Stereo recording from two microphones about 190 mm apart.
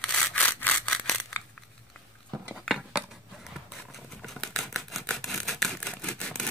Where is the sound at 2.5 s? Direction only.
Centre (ahead or behind).